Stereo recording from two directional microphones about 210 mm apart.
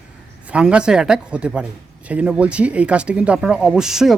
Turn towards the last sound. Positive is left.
turn(degrees=0)  # may be behind; listen again after turning